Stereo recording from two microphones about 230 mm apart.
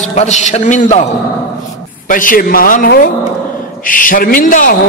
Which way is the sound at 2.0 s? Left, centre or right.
Left.